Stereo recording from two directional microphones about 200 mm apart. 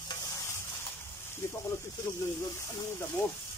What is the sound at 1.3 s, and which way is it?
Speech, 15° left (ahead or behind).